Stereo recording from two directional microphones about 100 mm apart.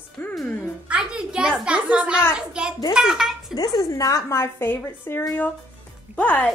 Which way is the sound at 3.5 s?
35° left (ahead or behind).